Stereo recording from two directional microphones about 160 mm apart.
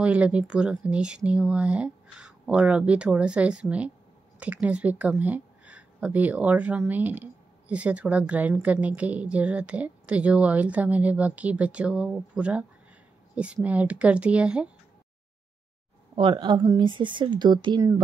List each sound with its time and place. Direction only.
0.0 s speech: 10° right (ahead or behind)
16.2 s a woman's voice: 30° right (ahead or behind)